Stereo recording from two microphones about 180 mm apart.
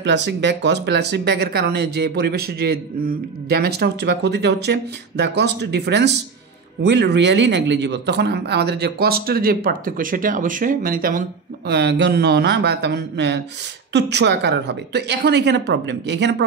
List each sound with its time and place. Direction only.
0.0 s a man's voice: 75° right (ahead or behind)